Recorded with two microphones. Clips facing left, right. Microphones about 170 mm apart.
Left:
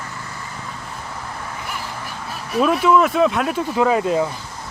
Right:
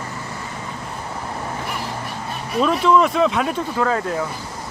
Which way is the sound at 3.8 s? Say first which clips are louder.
Left 5 dB; 15° left (ahead or behind).